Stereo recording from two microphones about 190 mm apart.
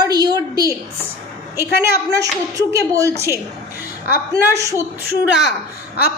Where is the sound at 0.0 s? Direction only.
20° right (ahead or behind).